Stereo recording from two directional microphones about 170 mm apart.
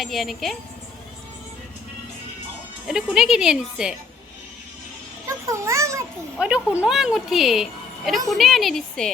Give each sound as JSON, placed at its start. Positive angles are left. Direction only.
{"t": 0.0, "sound": "a woman's voice", "side_deg": 0}
{"t": 2.8, "sound": "a woman's voice", "side_deg": 0}
{"t": 5.2, "sound": "children playing", "side_deg": -15}
{"t": 6.4, "sound": "a woman's voice", "side_deg": -5}